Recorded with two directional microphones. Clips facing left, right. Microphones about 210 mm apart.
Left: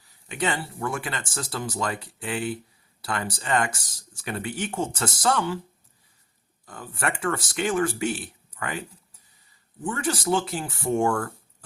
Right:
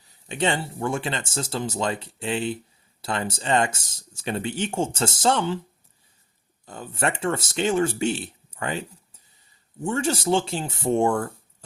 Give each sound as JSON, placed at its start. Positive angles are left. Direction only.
{"t": 0.0, "sound": "speech", "side_deg": -25}
{"t": 6.7, "sound": "speech", "side_deg": -25}